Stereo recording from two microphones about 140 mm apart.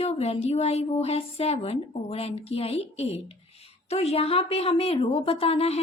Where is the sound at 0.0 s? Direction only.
50° left (ahead or behind).